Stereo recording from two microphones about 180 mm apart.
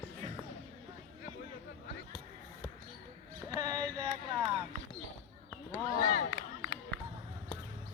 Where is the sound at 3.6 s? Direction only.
20° right (ahead or behind).